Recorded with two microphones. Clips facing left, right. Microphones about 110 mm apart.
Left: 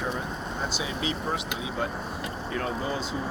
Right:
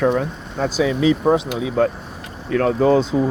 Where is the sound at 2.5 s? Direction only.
90° right.